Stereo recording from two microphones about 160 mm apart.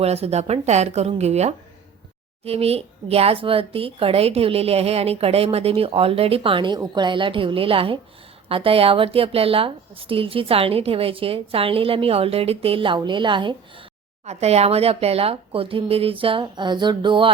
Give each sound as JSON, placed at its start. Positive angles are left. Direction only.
{"t": 0.0, "sound": "speech", "side_deg": -40}
{"t": 14.3, "sound": "speech", "side_deg": -40}